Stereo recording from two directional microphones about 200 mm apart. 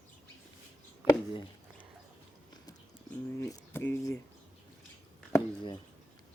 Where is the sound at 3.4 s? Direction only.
15° left (ahead or behind).